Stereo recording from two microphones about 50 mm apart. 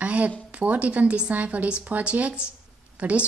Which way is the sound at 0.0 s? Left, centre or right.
Right.